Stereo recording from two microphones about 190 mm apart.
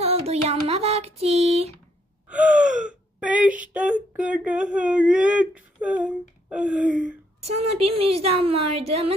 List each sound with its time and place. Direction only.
0.0 s a woman's voice: 35° right (ahead or behind)
2.6 s gasp: 40° right (ahead or behind)
2.8 s gasp: 5° right (ahead or behind)
3.7 s speech: 5° right (ahead or behind)
7.4 s a woman's voice: 35° right (ahead or behind)